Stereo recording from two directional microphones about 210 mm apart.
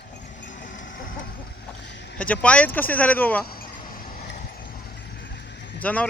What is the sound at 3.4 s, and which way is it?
Vehicle, 45° left (ahead or behind).